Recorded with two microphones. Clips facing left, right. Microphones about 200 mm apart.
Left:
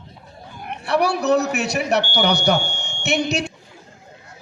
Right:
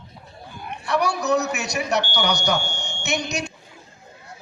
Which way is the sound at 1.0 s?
60° left (ahead or behind).